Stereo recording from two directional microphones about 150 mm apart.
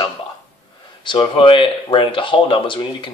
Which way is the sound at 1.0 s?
35° left (ahead or behind).